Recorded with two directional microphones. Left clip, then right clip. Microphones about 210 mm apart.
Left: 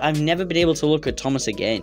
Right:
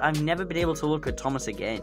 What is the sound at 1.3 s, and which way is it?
Speech, 40° left (ahead or behind).